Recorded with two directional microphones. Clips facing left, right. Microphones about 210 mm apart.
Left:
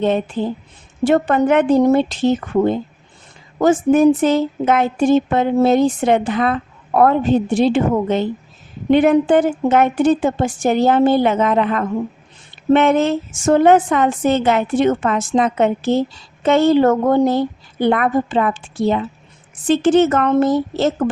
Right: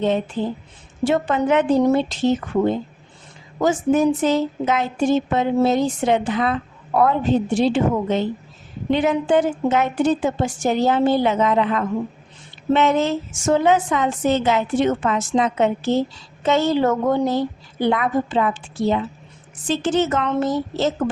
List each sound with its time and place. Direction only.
0.4 s speech: 60° left (ahead or behind)
3.6 s speech: 55° left (ahead or behind)